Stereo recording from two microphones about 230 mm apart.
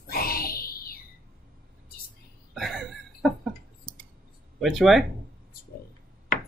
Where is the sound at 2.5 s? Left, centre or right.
Centre.